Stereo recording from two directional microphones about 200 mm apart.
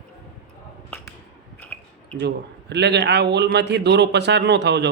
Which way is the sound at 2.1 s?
55° right (ahead or behind).